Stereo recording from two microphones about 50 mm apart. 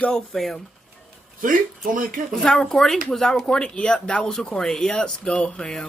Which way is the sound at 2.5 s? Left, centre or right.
Centre.